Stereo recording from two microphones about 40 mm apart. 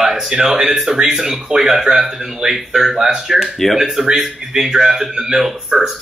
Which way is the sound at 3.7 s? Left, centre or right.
Centre.